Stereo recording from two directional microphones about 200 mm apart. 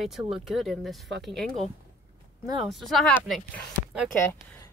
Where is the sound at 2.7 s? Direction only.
Centre (ahead or behind).